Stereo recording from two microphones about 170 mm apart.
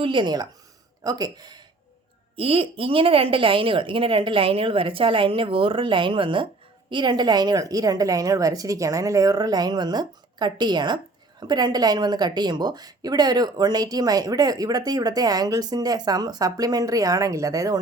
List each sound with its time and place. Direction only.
0.0 s a woman's voice: 30° right (ahead or behind)